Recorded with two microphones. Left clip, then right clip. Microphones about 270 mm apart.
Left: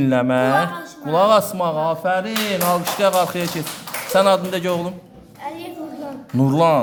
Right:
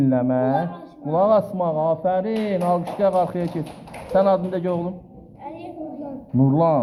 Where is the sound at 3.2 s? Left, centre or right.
Left.